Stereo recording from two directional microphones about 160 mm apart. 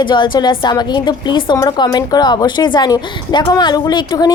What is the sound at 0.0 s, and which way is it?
A woman's voice, 30° left (ahead or behind).